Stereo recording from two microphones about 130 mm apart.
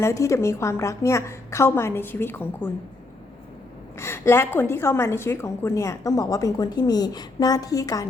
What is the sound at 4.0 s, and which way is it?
A woman's voice, 20° left (ahead or behind).